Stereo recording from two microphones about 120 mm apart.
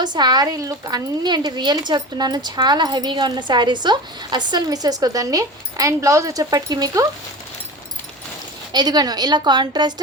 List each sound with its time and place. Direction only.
0.0 s speech: 35° right (ahead or behind)
8.7 s speech: 35° right (ahead or behind)